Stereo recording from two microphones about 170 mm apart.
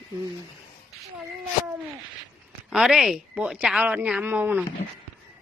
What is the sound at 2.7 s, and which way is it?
A woman's voice, 5° right (ahead or behind).